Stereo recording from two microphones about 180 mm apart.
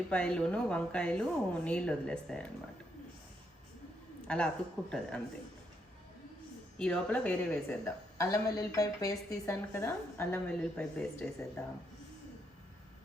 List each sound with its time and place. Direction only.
0.1 s speech: 5° left (ahead or behind)
4.3 s speech: 5° left (ahead or behind)
6.7 s a woman's voice: 5° left (ahead or behind)